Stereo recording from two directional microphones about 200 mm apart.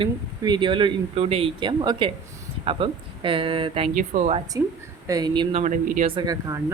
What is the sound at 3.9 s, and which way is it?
Speech, 40° right (ahead or behind).